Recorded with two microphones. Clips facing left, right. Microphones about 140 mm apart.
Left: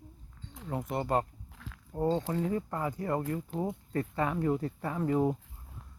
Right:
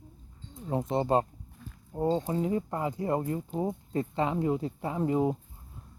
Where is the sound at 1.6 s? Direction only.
90° left.